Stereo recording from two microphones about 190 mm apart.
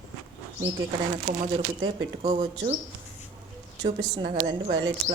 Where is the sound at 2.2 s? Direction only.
30° right (ahead or behind).